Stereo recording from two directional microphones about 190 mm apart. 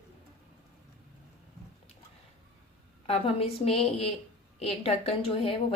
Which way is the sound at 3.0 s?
30° left (ahead or behind).